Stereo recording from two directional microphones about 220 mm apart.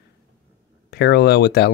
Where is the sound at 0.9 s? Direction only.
45° left (ahead or behind).